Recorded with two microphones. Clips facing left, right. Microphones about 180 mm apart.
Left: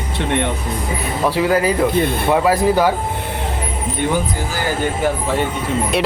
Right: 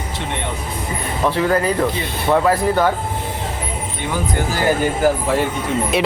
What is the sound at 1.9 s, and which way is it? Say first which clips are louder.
Speech: left 8 dB; 50° left (ahead or behind).